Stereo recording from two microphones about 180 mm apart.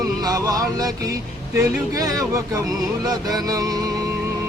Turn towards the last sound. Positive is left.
turn(degrees=-20)  # may be behind; listen again after turning